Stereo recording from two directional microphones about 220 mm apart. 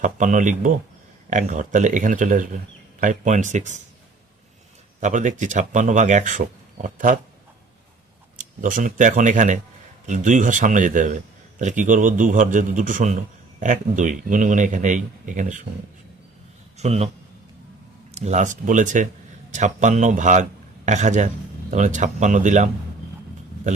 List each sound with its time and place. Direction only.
0.0 s a man's voice: 35° right (ahead or behind)
4.9 s a man's voice: 35° right (ahead or behind)
8.4 s a man's voice: 35° right (ahead or behind)
16.7 s a man's voice: 30° right (ahead or behind)
18.1 s a man's voice: 30° right (ahead or behind)